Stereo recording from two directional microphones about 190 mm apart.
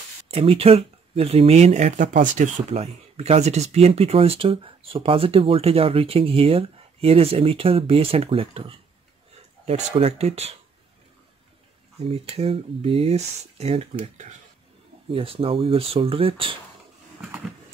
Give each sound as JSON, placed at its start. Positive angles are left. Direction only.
{"t": 0.3, "sound": "speech", "side_deg": -30}
{"t": 12.0, "sound": "speech", "side_deg": -30}